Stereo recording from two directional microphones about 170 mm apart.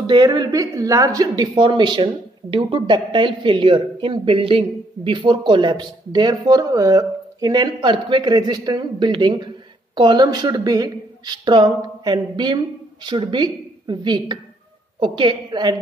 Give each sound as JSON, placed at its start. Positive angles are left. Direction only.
{"t": 0.0, "sound": "a woman's voice", "side_deg": -25}